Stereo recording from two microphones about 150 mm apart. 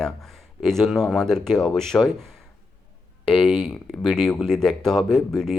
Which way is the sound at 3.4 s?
5° left (ahead or behind).